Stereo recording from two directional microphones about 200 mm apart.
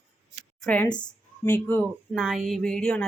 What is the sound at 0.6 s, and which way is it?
Speech, 5° left (ahead or behind).